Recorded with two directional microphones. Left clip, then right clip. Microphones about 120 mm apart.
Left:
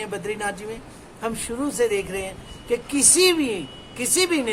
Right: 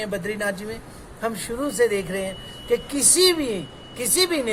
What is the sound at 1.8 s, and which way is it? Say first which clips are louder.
Speech: right 1 dB; 15° left (ahead or behind).